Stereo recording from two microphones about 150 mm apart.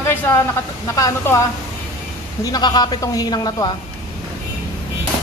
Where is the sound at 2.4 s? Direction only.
25° left (ahead or behind).